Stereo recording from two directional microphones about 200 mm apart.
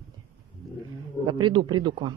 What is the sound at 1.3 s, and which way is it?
Speech, 25° right (ahead or behind).